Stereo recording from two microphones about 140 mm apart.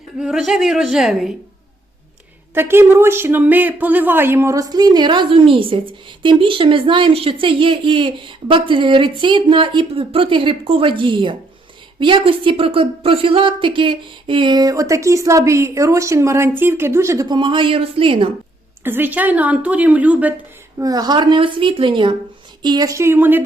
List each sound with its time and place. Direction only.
0.2 s a woman's voice: 5° right (ahead or behind)
2.6 s speech: 15° right (ahead or behind); by 18.3 s 40° right (ahead or behind)
18.8 s speech: 15° right (ahead or behind)
20.7 s speech: 25° right (ahead or behind)